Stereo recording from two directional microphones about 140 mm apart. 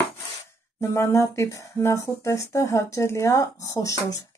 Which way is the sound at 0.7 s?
20° left (ahead or behind).